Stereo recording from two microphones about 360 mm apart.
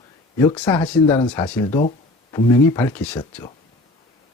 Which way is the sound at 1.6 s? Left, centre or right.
Centre.